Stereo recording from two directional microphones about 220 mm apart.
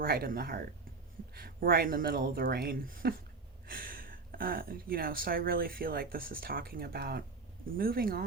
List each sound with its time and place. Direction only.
0.0 s speech: 45° right (ahead or behind)